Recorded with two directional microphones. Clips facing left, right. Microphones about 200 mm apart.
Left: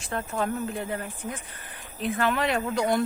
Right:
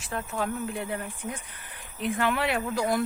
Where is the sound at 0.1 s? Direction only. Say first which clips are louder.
Left 2 dB; 5° right (ahead or behind).